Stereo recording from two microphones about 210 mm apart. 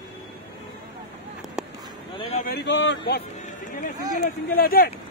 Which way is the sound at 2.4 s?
50° left (ahead or behind).